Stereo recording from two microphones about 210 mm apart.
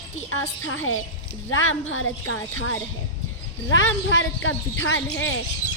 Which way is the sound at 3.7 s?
65° left (ahead or behind).